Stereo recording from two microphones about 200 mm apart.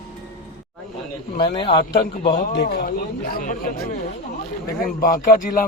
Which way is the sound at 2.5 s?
55° left (ahead or behind).